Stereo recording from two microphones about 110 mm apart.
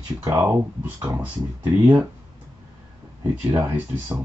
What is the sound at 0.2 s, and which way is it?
Speech, 25° right (ahead or behind).